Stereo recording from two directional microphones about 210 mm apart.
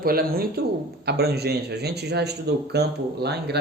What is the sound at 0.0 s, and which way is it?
Speech, 45° right (ahead or behind).